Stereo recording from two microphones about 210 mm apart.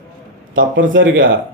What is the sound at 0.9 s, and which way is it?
Speech, 65° right (ahead or behind).